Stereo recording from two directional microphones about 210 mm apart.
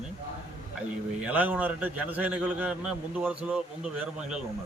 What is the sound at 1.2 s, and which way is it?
A man's voice, 10° right (ahead or behind).